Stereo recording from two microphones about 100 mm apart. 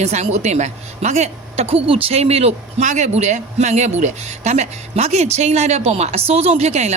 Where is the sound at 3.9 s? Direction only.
90° right.